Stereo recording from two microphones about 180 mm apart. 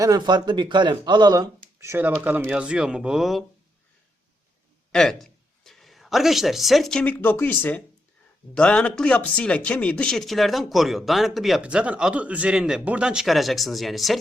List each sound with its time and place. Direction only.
0.0 s speech: 20° right (ahead or behind); by 3.4 s centre (ahead or behind)
4.9 s speech: centre (ahead or behind)